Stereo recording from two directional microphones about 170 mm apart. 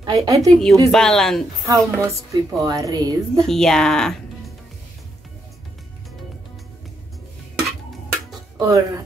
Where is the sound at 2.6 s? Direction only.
20° right (ahead or behind).